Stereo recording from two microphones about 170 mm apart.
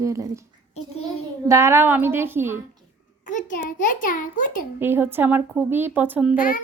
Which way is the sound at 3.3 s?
45° left (ahead or behind).